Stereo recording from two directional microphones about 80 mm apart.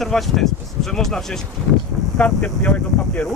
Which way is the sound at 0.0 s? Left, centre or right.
Centre.